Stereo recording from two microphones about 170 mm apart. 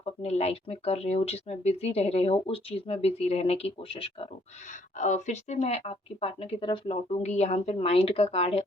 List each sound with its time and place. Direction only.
0.0 s speech: 40° left (ahead or behind)
4.7 s speech: 45° left (ahead or behind)